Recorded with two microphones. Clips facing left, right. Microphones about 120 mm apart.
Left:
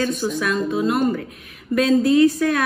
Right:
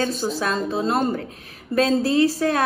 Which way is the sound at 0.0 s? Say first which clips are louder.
Left 1 dB; 30° right (ahead or behind).